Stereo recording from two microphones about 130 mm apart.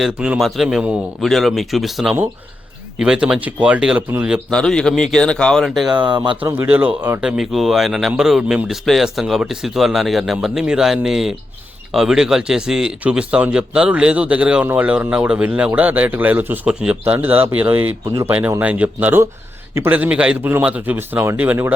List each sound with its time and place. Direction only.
0.0 s speech: 5° right (ahead or behind)
4.5 s speech: 5° left (ahead or behind)
5.9 s speech: 35° right (ahead or behind)
6.6 s speech: 10° right (ahead or behind)